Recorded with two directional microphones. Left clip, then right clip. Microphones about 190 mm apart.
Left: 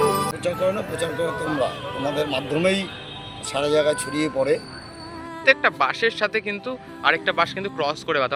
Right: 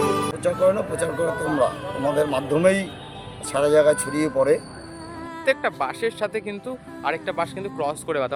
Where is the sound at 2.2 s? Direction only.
15° right (ahead or behind).